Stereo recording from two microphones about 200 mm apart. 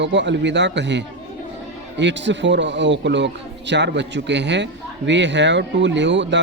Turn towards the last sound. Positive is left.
turn(degrees=-65)  # may be behind; listen again after turning